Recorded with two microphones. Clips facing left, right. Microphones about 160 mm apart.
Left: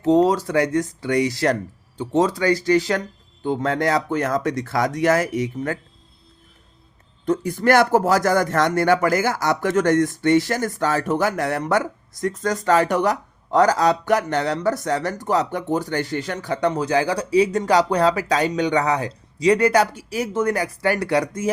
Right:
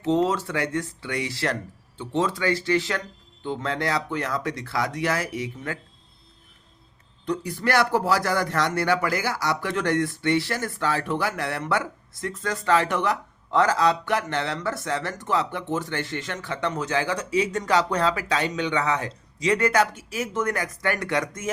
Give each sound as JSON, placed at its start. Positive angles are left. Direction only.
{"t": 0.0, "sound": "speech", "side_deg": 40}
{"t": 7.3, "sound": "speech", "side_deg": 45}